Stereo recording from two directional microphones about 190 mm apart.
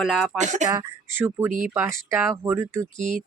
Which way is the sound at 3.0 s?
45° right (ahead or behind).